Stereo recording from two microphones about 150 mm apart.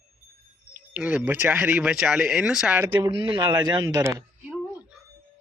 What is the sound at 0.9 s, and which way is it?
Speech, 10° right (ahead or behind).